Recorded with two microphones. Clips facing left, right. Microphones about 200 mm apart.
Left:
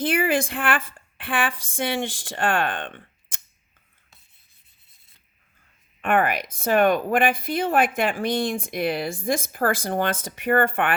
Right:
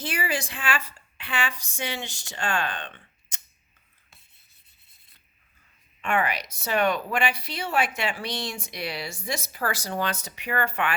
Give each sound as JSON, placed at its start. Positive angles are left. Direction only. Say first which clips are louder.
{"t": 0.0, "sound": "a woman's voice", "louder": "left 8 dB", "side_deg": 55}
{"t": 6.0, "sound": "speech", "louder": "left 5 dB", "side_deg": 55}